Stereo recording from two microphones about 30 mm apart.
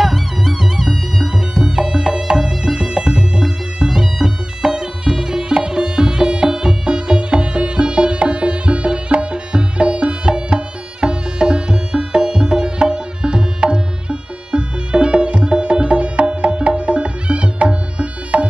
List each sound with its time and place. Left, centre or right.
0.0 s music: centre
0.7 s music: centre; by 18.5 s right